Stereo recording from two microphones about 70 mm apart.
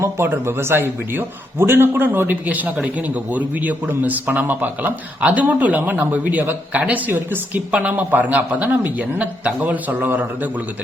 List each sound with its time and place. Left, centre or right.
0.3 s a man's voice: right